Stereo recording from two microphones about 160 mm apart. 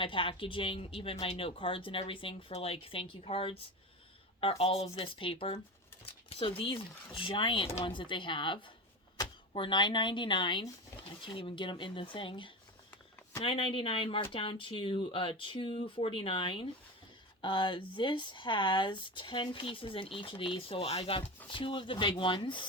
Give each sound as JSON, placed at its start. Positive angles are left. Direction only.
{"t": 0.0, "sound": "speech", "side_deg": 35}